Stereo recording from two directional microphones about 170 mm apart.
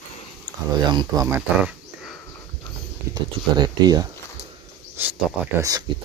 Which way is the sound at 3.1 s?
25° right (ahead or behind).